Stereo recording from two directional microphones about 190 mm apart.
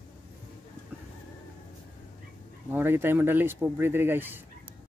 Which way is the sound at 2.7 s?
10° right (ahead or behind).